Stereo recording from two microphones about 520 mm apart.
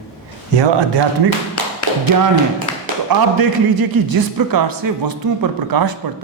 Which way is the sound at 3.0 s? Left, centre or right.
Right.